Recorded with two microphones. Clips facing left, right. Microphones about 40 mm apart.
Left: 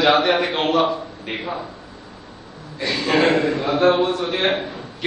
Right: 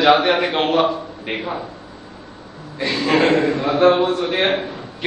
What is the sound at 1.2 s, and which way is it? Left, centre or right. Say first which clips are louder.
Speech: right 2 dB; right.